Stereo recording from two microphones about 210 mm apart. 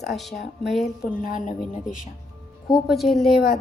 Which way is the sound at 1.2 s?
35° left (ahead or behind).